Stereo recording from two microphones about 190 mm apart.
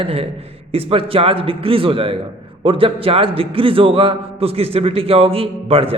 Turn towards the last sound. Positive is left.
turn(degrees=-30)  # may be behind; listen again after turning